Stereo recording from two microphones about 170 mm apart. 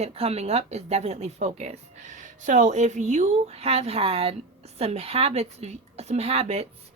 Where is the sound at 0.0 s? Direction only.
35° right (ahead or behind).